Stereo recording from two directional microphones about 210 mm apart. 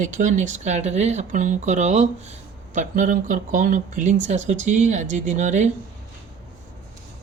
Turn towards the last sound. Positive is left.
turn(degrees=-35)  # may be behind; listen again after turning